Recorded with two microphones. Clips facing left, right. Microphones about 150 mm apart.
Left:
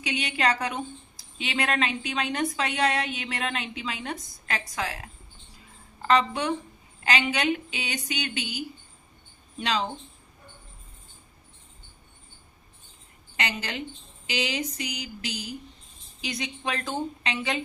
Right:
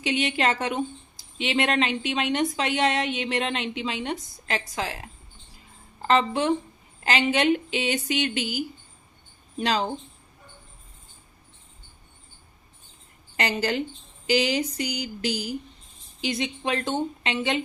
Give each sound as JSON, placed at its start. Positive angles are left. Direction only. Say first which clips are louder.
{"t": 0.0, "sound": "a woman's voice", "louder": "right 3 dB", "side_deg": -25}
{"t": 6.0, "sound": "speech", "louder": "right 1 dB", "side_deg": -30}
{"t": 9.6, "sound": "speech", "louder": "right 3 dB", "side_deg": -35}
{"t": 13.3, "sound": "a woman's voice", "louder": "right 7 dB", "side_deg": -35}